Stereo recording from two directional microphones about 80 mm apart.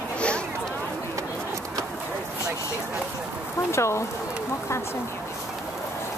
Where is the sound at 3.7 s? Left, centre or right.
Left.